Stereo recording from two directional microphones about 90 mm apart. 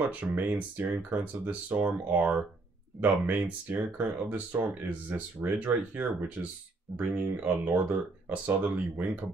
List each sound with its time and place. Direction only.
0.1 s speech: 15° right (ahead or behind)